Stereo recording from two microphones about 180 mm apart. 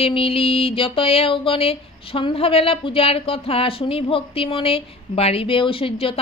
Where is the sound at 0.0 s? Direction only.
30° left (ahead or behind).